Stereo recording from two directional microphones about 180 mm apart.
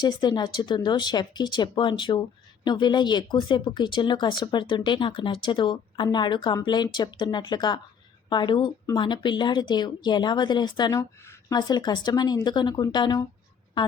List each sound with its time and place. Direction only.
0.0 s speech: 25° left (ahead or behind)